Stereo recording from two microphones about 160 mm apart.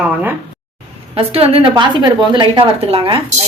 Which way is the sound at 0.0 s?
10° right (ahead or behind).